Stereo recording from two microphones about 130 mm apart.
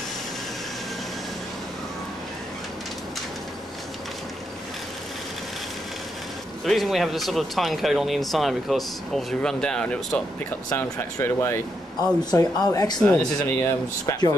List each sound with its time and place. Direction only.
6.6 s speech: centre (ahead or behind)
10.8 s speech: 20° left (ahead or behind)
13.0 s speech: 10° left (ahead or behind)
13.4 s speech: 20° left (ahead or behind)